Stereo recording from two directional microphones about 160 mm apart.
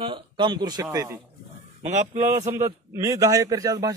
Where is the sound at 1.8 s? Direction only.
45° right (ahead or behind).